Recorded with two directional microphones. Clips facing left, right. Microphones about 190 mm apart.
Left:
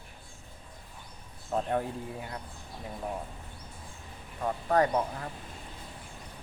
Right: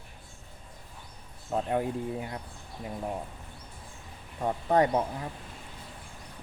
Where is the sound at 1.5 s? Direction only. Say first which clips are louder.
Right 2 dB; 10° right (ahead or behind).